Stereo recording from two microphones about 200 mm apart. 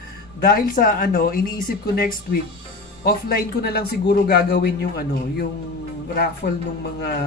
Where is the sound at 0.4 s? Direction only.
45° left (ahead or behind).